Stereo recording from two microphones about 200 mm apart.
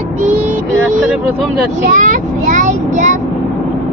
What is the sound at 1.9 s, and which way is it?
A child's voice, 40° right (ahead or behind).